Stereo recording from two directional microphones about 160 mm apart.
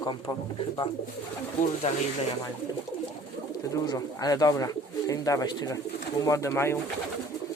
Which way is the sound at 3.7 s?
25° left (ahead or behind).